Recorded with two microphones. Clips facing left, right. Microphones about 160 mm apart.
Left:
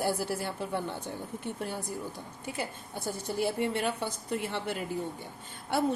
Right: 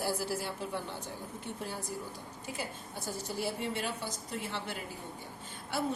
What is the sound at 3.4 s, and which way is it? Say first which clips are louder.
A woman's voice: left 7 dB; 60° left (ahead or behind).